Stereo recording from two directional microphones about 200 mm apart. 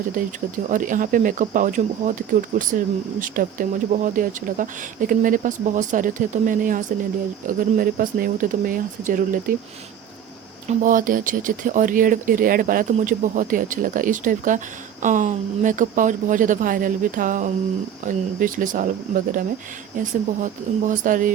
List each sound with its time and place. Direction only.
0.1 s speech: 40° right (ahead or behind)
10.7 s speech: 40° right (ahead or behind)